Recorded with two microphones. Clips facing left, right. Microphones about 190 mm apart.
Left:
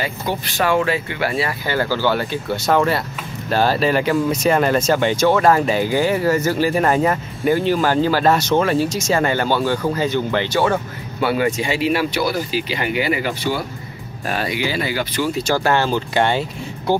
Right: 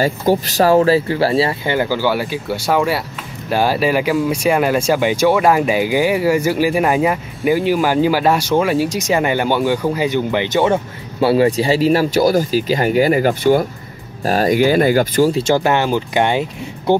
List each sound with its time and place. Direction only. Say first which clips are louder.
0.0 s speech: right 8 dB; 40° right (ahead or behind)
14.2 s speech: right 9 dB; 40° right (ahead or behind)
15.3 s speech: right 3 dB; 20° right (ahead or behind)